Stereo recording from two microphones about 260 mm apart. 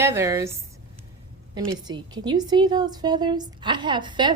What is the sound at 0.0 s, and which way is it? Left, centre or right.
Speech, centre.